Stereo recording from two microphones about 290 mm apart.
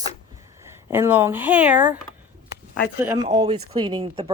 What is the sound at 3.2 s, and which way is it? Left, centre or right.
Speech, right.